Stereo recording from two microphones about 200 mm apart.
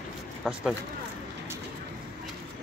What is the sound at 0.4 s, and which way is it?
Speech, centre (ahead or behind).